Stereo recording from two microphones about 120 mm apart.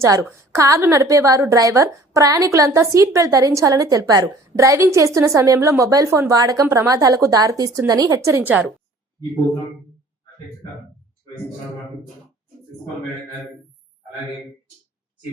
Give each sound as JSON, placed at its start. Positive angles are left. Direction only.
{"t": 0.0, "sound": "a woman's voice", "side_deg": -30}